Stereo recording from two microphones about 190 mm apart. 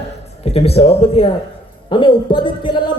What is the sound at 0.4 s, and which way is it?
A man's voice, 30° left (ahead or behind).